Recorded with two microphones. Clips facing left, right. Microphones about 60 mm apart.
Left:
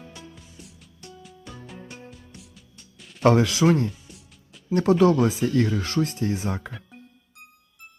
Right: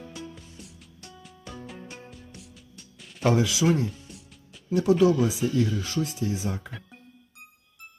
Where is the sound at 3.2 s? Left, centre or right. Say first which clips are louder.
Left 4 dB; left.